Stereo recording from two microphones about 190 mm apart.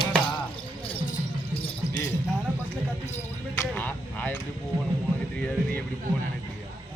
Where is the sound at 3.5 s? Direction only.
5° left (ahead or behind).